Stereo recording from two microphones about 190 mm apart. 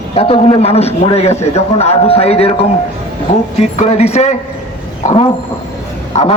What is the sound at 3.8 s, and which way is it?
A man's voice, 35° left (ahead or behind).